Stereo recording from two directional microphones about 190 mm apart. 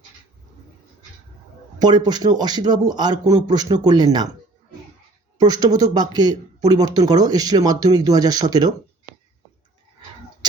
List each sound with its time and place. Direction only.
1.8 s speech: 20° right (ahead or behind)
5.4 s speech: 20° right (ahead or behind)